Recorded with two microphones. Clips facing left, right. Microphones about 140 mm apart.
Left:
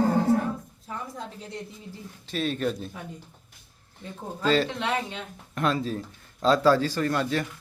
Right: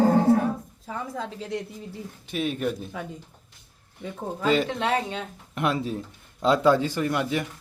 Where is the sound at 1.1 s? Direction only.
90° right.